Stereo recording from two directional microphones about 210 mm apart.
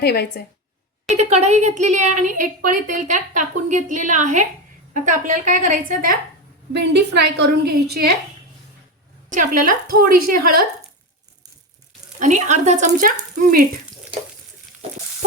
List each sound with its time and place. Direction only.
0.0 s a woman's voice: 50° left (ahead or behind)
1.0 s a woman's voice: 30° right (ahead or behind)
6.7 s a woman's voice: 55° right (ahead or behind)
9.3 s a woman's voice: 40° right (ahead or behind)
12.2 s a woman's voice: 35° right (ahead or behind)